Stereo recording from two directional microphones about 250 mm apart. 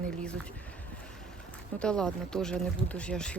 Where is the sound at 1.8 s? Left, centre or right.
Centre.